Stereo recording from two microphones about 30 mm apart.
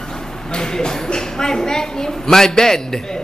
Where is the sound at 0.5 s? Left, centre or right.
Left.